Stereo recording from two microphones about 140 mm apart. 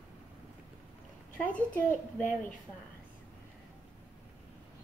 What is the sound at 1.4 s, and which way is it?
Speech, 10° left (ahead or behind).